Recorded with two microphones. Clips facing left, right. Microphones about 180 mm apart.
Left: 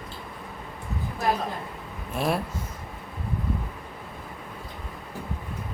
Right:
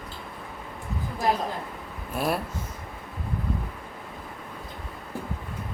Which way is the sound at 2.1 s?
Centre (ahead or behind).